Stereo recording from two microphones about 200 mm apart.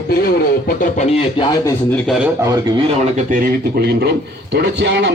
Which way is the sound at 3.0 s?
40° right (ahead or behind).